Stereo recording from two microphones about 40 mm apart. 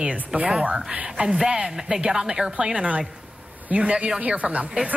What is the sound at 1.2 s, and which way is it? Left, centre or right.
Speech, centre.